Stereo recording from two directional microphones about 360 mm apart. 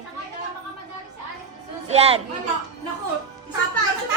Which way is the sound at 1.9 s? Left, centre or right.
Centre.